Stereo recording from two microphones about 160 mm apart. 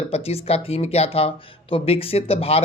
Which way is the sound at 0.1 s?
40° left (ahead or behind).